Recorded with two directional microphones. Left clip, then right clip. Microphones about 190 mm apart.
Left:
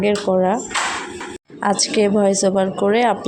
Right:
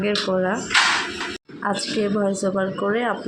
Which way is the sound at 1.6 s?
20° left (ahead or behind).